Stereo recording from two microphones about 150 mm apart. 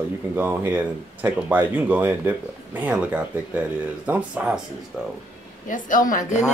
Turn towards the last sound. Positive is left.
turn(degrees=60)  # may be behind; listen again after turning